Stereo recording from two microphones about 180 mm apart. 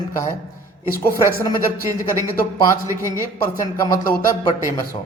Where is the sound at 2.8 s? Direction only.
15° right (ahead or behind).